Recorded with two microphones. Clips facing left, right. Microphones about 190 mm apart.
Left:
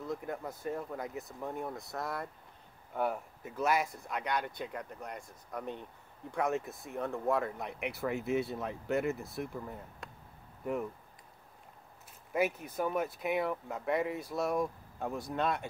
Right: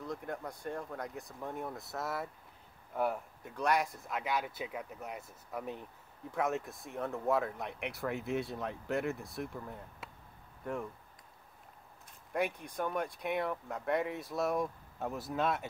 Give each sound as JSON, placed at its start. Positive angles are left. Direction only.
{"t": 0.0, "sound": "speech", "side_deg": 0}
{"t": 12.3, "sound": "speech", "side_deg": 5}